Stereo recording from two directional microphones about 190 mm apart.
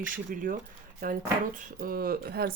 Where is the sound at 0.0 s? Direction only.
45° right (ahead or behind).